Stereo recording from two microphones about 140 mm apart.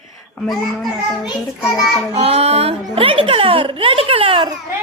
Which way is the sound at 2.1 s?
45° right (ahead or behind).